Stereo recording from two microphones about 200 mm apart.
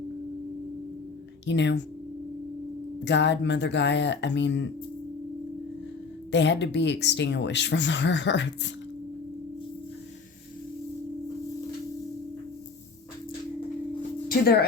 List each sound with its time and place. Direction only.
1.5 s speech: 60° left (ahead or behind)
3.0 s speech: 60° left (ahead or behind)
6.3 s speech: 60° left (ahead or behind)
14.3 s music: 50° left (ahead or behind)